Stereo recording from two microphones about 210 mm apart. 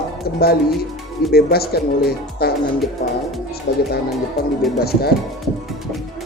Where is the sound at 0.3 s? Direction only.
45° left (ahead or behind).